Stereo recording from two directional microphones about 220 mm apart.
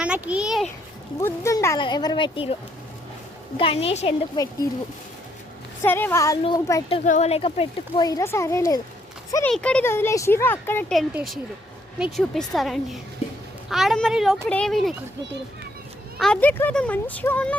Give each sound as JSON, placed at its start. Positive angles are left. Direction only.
{"t": 0.0, "sound": "a woman's voice", "side_deg": -5}
{"t": 1.2, "sound": "speech", "side_deg": 15}
{"t": 3.6, "sound": "speech", "side_deg": 25}
{"t": 5.8, "sound": "speech", "side_deg": 10}
{"t": 7.0, "sound": "a woman's voice", "side_deg": 30}
{"t": 16.1, "sound": "speech", "side_deg": 5}